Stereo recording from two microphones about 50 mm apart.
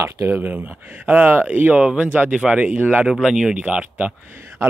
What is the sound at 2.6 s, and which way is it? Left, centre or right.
Speech, right.